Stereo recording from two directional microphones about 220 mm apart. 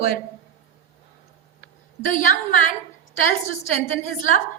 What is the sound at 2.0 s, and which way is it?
Speech, 35° left (ahead or behind).